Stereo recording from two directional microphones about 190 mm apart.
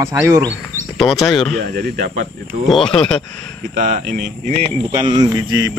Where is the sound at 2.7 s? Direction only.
5° left (ahead or behind).